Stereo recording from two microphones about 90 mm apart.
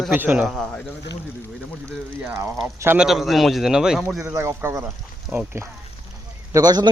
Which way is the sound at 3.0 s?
5° right (ahead or behind).